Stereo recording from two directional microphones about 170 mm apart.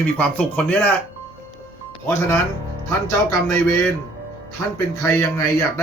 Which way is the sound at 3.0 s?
20° left (ahead or behind).